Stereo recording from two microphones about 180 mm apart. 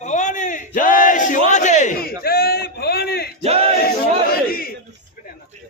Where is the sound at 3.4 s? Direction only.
35° right (ahead or behind).